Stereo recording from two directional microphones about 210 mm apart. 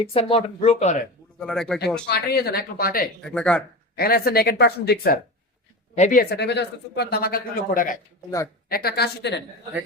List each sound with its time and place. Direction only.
0.0 s speech: 25° left (ahead or behind)
1.4 s speech: 5° left (ahead or behind)
2.0 s speech: 50° left (ahead or behind)
3.2 s speech: 5° left (ahead or behind)
3.9 s speech: 45° left (ahead or behind)
6.3 s speech: 55° left (ahead or behind)